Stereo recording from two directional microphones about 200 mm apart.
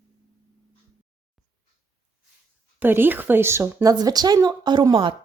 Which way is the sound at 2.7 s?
10° right (ahead or behind).